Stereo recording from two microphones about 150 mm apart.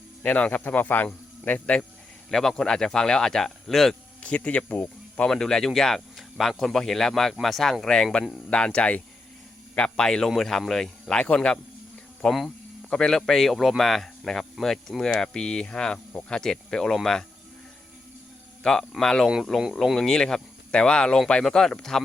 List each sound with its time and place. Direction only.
0.2 s speech: 10° left (ahead or behind)
18.6 s speech: 5° left (ahead or behind)